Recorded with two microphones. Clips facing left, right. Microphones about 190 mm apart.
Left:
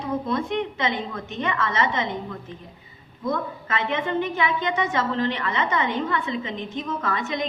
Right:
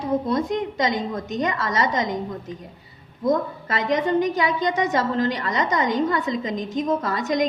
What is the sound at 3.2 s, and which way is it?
A woman's voice, 40° right (ahead or behind).